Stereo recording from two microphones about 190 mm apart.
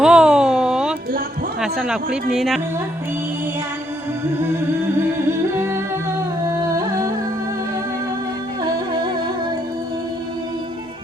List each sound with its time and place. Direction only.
0.0 s a sound: 5° right (ahead or behind)
1.6 s speech: 5° right (ahead or behind)
5.2 s humming: 10° right (ahead or behind)
6.5 s carnatic music: 15° right (ahead or behind)